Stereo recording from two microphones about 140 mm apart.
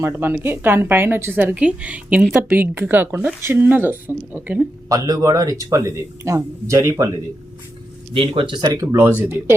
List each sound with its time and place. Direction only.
0.0 s a woman's voice: 15° right (ahead or behind)
4.9 s speech: 25° right (ahead or behind)
8.1 s speech: 40° right (ahead or behind)
8.7 s a woman's voice: 20° right (ahead or behind)